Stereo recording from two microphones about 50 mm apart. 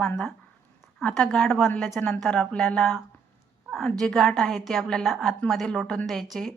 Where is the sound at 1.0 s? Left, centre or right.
Centre.